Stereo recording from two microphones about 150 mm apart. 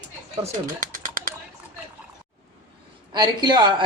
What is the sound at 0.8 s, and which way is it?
Bird, 60° right (ahead or behind).